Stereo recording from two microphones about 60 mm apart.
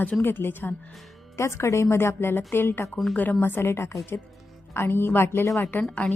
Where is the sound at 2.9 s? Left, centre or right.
Centre.